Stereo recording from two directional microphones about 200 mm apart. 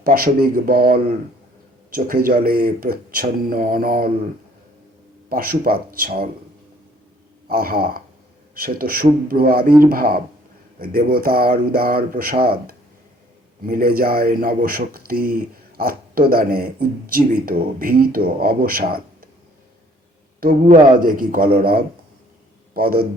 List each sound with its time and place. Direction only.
0.0 s speech: 45° right (ahead or behind)
5.3 s speech: 45° right (ahead or behind)
7.4 s speech: 50° right (ahead or behind)
20.4 s speech: 40° right (ahead or behind)